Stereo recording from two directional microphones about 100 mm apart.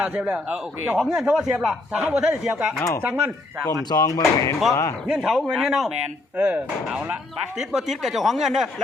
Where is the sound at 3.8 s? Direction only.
40° left (ahead or behind).